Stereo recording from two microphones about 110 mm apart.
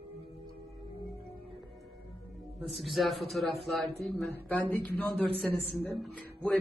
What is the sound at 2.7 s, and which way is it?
A man's voice, centre (ahead or behind).